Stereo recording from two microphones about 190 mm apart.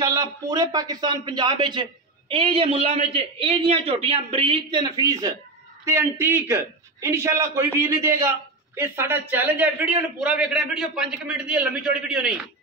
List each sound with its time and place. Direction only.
0.0 s a man's voice: 20° right (ahead or behind); by 12.3 s 5° right (ahead or behind)